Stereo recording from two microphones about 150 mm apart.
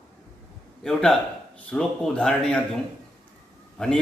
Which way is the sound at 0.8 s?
5° left (ahead or behind).